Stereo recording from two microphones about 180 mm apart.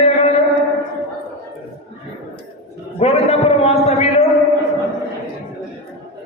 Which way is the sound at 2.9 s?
35° left (ahead or behind).